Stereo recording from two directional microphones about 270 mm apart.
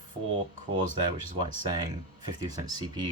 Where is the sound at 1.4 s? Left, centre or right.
Centre.